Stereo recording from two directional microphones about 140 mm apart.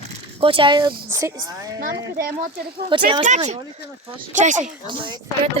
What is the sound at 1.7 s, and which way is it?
Speech, 90° right.